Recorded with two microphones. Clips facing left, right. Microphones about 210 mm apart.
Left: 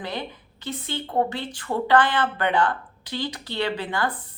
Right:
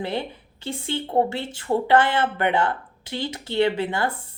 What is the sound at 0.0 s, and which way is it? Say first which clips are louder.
Speech: right 4 dB; 25° right (ahead or behind).